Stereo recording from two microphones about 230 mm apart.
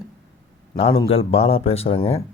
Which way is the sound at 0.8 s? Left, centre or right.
Left.